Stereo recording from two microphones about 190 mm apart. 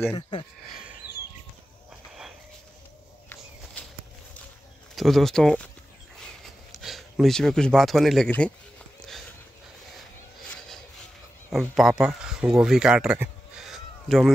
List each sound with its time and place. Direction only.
0.1 s speech: 25° left (ahead or behind)
3.8 s walk: 10° left (ahead or behind)
4.9 s speech: centre (ahead or behind)
6.7 s a sound: centre (ahead or behind)
11.5 s speech: centre (ahead or behind)